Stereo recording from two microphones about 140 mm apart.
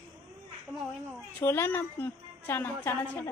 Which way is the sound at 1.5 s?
15° left (ahead or behind).